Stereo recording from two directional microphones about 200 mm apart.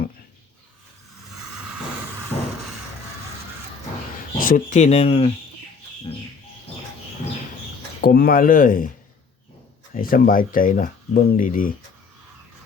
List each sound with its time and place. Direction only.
4.4 s speech: 40° left (ahead or behind)
8.0 s speech: 50° left (ahead or behind)
9.9 s speech: 45° left (ahead or behind)